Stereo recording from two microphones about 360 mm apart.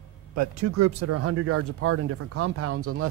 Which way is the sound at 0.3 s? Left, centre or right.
Right.